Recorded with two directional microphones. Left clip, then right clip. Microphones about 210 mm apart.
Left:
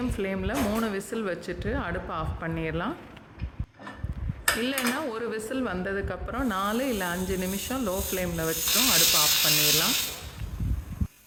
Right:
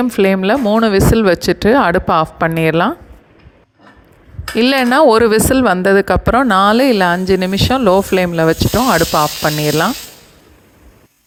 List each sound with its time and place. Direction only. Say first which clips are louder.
0.1 s speech: right 18 dB; 40° right (ahead or behind)
4.6 s speech: right 19 dB; 45° right (ahead or behind)